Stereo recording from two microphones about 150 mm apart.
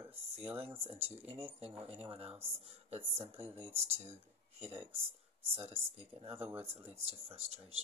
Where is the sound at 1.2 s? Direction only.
40° right (ahead or behind).